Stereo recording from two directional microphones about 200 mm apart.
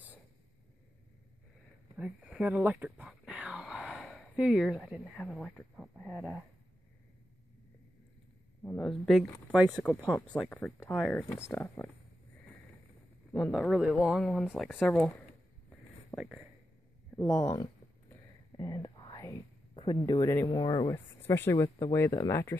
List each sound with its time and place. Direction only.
2.0 s speech: 5° right (ahead or behind)
8.6 s speech: 5° left (ahead or behind)
13.3 s speech: 5° left (ahead or behind)
16.2 s speech: centre (ahead or behind)
17.4 s speech: 20° left (ahead or behind)
20.4 s speech: 25° left (ahead or behind)